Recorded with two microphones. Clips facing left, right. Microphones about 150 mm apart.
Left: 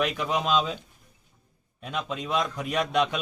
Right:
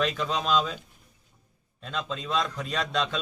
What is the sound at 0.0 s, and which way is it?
Speech, 15° left (ahead or behind).